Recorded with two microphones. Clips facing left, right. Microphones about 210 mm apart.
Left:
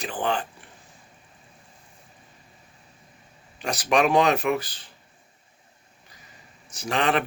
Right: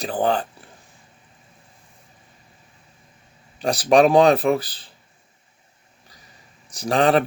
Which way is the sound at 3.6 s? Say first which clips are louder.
Right 7 dB; 35° right (ahead or behind).